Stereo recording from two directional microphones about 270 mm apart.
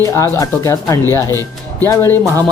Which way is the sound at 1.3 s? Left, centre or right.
Centre.